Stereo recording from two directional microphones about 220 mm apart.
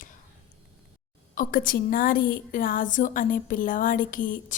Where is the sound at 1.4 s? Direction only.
40° left (ahead or behind).